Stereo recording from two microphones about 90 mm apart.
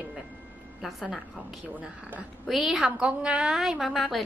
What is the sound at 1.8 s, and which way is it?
Speech, 15° right (ahead or behind).